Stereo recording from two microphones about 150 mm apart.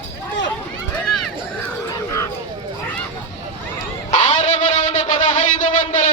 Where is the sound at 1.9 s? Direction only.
20° left (ahead or behind).